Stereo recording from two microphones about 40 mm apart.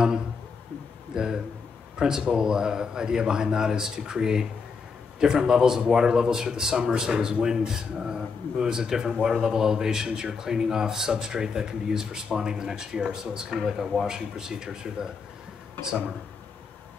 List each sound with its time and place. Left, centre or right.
1.1 s speech: centre